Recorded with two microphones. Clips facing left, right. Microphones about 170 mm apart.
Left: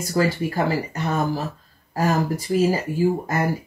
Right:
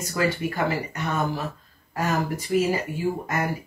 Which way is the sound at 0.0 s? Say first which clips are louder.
Left 3 dB; 35° left (ahead or behind).